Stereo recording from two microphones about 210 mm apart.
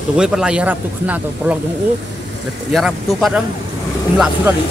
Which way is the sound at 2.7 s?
Centre (ahead or behind).